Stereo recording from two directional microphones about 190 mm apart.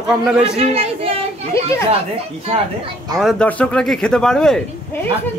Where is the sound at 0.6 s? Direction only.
30° right (ahead or behind).